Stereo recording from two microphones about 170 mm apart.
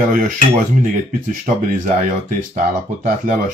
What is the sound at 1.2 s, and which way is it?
Speech, 50° right (ahead or behind).